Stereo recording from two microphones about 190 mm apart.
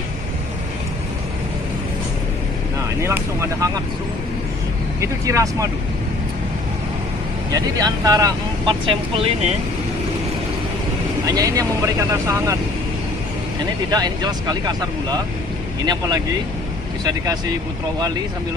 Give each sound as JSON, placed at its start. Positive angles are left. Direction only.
{"t": 3.0, "sound": "speech", "side_deg": -15}
{"t": 5.0, "sound": "speech", "side_deg": -15}
{"t": 7.5, "sound": "speech", "side_deg": -20}
{"t": 11.2, "sound": "speech", "side_deg": -15}
{"t": 13.8, "sound": "speech", "side_deg": -20}
{"t": 15.8, "sound": "speech", "side_deg": -20}